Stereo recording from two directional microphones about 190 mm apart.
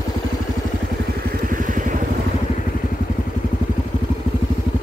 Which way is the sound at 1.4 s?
45° right (ahead or behind).